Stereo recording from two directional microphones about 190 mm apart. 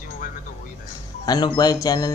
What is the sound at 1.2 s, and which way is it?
Speech, 20° left (ahead or behind).